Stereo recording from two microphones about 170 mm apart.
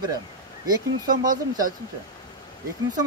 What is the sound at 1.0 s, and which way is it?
Speech, 55° right (ahead or behind).